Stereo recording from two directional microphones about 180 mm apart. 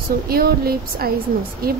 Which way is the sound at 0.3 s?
55° right (ahead or behind).